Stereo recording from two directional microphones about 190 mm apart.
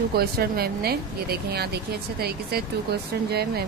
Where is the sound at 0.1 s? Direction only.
55° right (ahead or behind).